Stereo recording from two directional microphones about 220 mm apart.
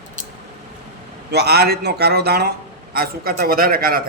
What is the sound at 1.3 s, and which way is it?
A man's voice, 45° right (ahead or behind).